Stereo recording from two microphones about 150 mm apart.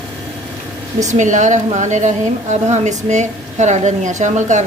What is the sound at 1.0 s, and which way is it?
A woman's voice, 50° right (ahead or behind).